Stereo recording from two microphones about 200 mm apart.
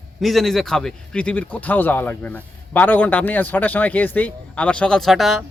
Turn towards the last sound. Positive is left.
turn(degrees=0)  # may be behind; listen again after turning